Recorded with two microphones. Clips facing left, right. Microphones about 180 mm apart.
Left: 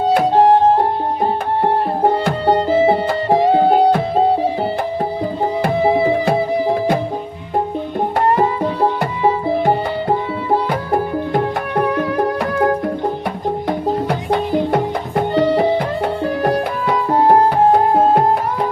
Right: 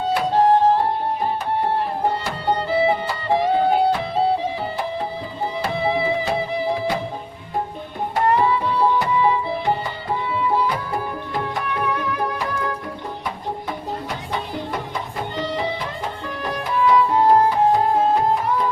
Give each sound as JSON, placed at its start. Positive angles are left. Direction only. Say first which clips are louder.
{"t": 0.1, "sound": "music", "louder": "left 5 dB", "side_deg": 50}
{"t": 2.2, "sound": "music", "louder": "left 7 dB", "side_deg": 45}
{"t": 5.6, "sound": "music", "louder": "left 7 dB", "side_deg": 45}
{"t": 8.4, "sound": "music", "louder": "left 3 dB", "side_deg": 45}
{"t": 13.7, "sound": "music", "louder": "left 10 dB", "side_deg": 65}